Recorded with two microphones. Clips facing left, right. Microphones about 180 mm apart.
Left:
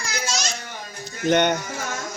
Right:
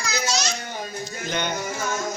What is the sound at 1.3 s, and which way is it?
Music, 70° left (ahead or behind).